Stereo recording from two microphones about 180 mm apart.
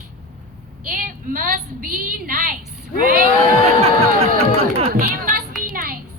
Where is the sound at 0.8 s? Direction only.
50° right (ahead or behind).